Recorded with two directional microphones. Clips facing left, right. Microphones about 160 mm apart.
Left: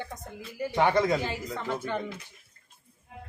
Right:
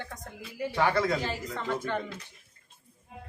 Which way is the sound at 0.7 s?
20° left (ahead or behind).